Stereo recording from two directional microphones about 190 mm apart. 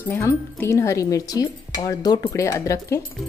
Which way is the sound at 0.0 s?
10° left (ahead or behind).